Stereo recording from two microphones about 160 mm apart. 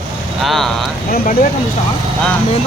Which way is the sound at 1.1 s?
60° left (ahead or behind).